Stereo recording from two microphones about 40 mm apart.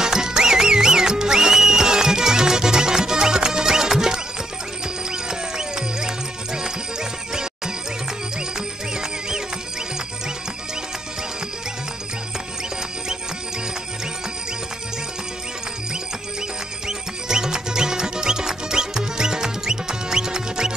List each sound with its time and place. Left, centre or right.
0.0 s music: centre
16.8 s music: centre